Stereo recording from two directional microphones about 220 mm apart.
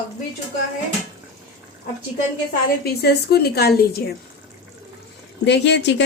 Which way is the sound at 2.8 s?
45° left (ahead or behind).